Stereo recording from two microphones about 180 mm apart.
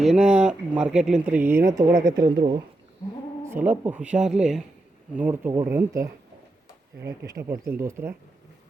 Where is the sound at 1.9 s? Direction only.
50° right (ahead or behind).